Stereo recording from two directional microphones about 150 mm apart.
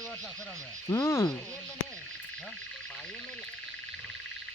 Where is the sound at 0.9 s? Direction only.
20° left (ahead or behind).